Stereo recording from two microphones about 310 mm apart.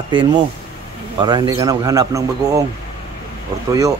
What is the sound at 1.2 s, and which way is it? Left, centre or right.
A man's voice, centre.